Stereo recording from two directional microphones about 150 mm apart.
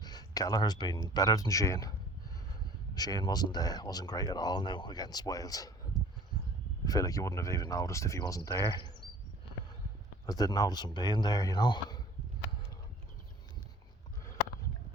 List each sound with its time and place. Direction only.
0.0 s a sound: 25° left (ahead or behind)
1.0 s speech: 25° left (ahead or behind)
2.9 s speech: 25° left (ahead or behind)
6.8 s speech: 25° left (ahead or behind)
10.2 s speech: 25° left (ahead or behind)